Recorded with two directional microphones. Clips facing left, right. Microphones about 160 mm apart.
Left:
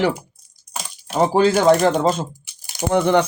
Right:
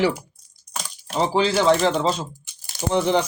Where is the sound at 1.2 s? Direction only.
50° left (ahead or behind).